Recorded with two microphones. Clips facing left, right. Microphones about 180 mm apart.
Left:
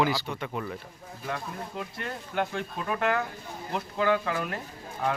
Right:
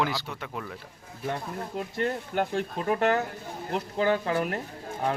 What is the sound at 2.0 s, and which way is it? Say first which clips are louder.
Speech: right 4 dB; 40° right (ahead or behind).